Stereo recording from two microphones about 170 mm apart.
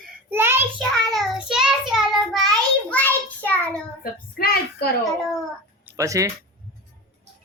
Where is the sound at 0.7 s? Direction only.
5° left (ahead or behind).